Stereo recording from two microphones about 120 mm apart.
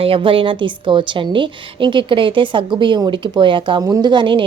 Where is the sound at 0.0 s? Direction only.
45° right (ahead or behind).